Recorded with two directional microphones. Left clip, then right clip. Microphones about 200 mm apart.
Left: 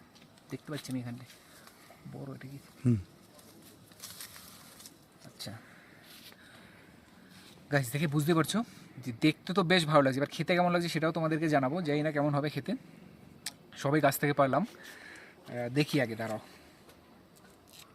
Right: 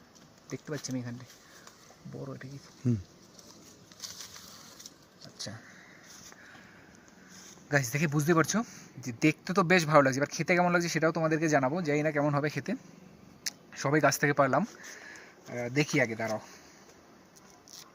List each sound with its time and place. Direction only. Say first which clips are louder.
2.2 s speech: right 3 dB; 25° right (ahead or behind)
2.8 s speech: left 1 dB; 20° left (ahead or behind)
7.7 s speech: right 3 dB; centre (ahead or behind)
13.8 s speech: right 2 dB; centre (ahead or behind)